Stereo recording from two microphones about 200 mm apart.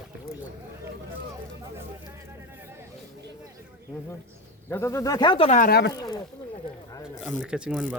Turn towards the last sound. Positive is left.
turn(degrees=0)  # may be behind; listen again after turning